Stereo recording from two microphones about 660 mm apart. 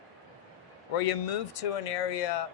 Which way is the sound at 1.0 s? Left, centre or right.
Left.